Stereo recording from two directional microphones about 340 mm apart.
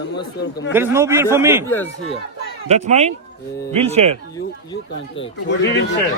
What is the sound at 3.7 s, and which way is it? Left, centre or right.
Speech, centre.